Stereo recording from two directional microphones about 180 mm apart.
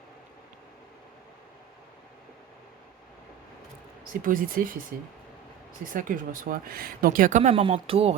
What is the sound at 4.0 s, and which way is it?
Speech, 50° right (ahead or behind).